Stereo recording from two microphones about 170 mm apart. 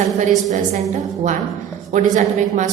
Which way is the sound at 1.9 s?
45° right (ahead or behind).